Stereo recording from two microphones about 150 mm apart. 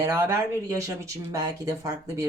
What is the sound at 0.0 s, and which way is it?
Speech, 15° right (ahead or behind).